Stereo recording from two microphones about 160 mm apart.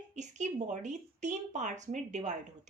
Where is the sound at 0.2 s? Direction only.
50° right (ahead or behind).